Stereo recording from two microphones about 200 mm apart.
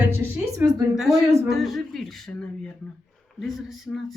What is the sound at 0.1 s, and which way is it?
Speech, 15° right (ahead or behind).